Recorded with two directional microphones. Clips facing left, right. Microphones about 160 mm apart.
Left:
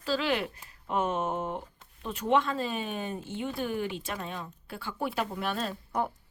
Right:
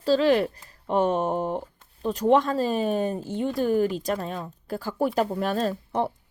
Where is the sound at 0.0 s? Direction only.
35° right (ahead or behind).